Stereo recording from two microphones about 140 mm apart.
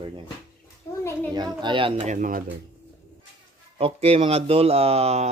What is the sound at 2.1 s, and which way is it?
Speech, 70° right (ahead or behind).